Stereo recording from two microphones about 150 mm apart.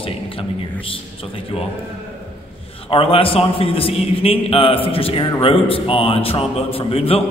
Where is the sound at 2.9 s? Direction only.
40° left (ahead or behind).